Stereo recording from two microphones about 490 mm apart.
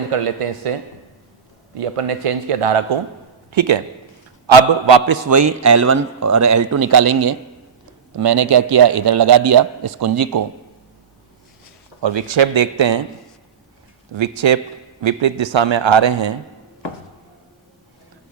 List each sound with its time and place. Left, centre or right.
0.1 s a man's voice: right
3.5 s a man's voice: right
5.3 s a man's voice: right
12.0 s a man's voice: right
14.1 s a man's voice: right